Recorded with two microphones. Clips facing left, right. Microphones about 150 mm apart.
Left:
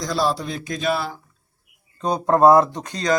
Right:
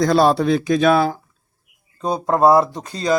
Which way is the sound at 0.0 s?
60° right (ahead or behind).